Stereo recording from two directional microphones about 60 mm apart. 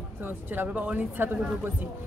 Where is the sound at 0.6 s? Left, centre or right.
Right.